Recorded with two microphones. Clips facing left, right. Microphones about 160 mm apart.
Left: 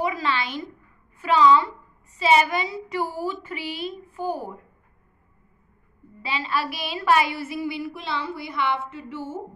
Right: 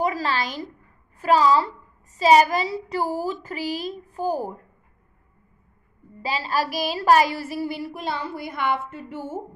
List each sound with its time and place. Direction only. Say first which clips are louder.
0.0 s a woman's voice: right 1 dB; 40° right (ahead or behind)
6.2 s a woman's voice: right 2 dB; 40° right (ahead or behind)